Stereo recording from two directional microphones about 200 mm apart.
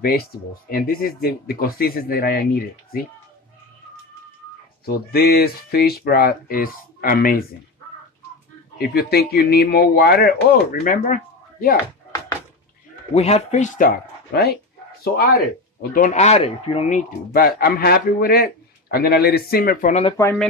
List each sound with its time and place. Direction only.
0.0 s speech: 50° left (ahead or behind)
4.8 s speech: 50° left (ahead or behind)
8.7 s speech: 50° left (ahead or behind)
13.1 s speech: 30° left (ahead or behind); by 14.6 s 50° left (ahead or behind)
15.9 s speech: 40° left (ahead or behind)
17.3 s speech: 50° left (ahead or behind)
20.1 s speech: 15° left (ahead or behind)